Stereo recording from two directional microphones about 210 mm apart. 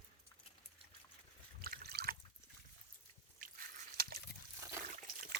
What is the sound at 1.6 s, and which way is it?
Water, 45° right (ahead or behind).